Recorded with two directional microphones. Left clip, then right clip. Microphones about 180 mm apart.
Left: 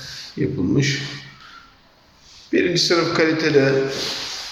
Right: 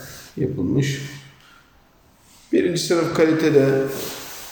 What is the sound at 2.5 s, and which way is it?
Speech, 20° right (ahead or behind).